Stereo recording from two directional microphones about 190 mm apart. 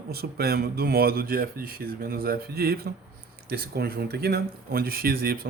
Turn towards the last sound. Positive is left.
turn(degrees=-50)  # may be behind; listen again after turning